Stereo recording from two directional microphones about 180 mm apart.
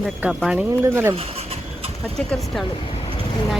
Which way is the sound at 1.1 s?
35° right (ahead or behind).